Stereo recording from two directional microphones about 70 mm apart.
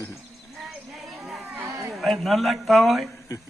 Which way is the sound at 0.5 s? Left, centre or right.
Centre.